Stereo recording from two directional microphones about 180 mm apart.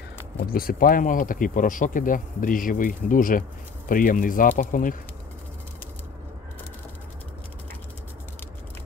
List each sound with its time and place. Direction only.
0.4 s speech: 55° left (ahead or behind)